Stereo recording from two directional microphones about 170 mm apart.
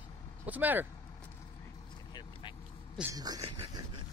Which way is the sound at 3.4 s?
30° right (ahead or behind).